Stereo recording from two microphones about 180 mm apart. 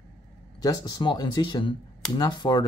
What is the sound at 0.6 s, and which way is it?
Speech, 20° left (ahead or behind).